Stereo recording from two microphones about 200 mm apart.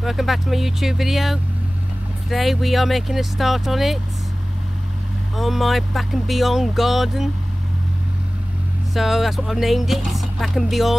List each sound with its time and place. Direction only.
0.0 s speech: centre (ahead or behind)
5.3 s speech: centre (ahead or behind)
8.9 s speech: centre (ahead or behind)